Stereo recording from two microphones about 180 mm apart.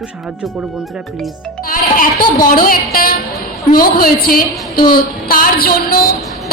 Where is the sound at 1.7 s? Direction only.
50° left (ahead or behind).